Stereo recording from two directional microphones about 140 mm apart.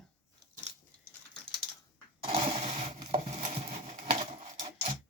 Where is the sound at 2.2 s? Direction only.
40° right (ahead or behind).